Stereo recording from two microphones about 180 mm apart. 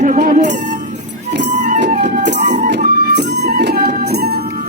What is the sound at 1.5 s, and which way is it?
Music, 40° right (ahead or behind).